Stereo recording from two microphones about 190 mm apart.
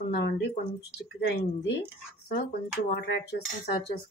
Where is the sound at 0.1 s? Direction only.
60° left (ahead or behind).